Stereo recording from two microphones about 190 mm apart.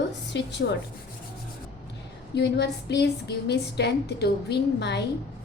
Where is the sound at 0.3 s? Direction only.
65° left (ahead or behind).